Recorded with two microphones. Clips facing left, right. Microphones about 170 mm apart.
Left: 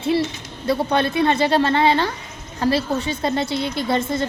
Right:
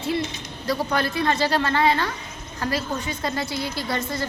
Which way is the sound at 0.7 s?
25° left (ahead or behind).